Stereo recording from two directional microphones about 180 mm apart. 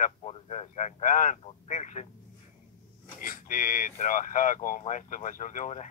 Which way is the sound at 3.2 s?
50° left (ahead or behind).